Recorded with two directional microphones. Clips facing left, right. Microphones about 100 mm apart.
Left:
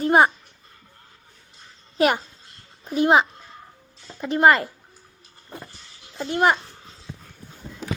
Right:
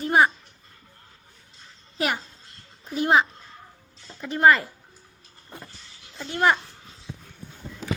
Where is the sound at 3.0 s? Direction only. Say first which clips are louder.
Left 3 dB; 20° left (ahead or behind).